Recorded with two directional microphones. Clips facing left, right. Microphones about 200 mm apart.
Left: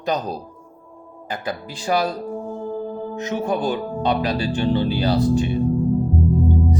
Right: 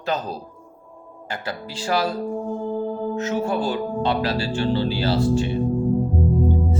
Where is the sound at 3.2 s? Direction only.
20° left (ahead or behind).